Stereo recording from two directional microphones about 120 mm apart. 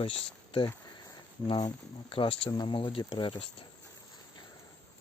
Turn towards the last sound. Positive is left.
turn(degrees=45)  # may be behind; listen again after turning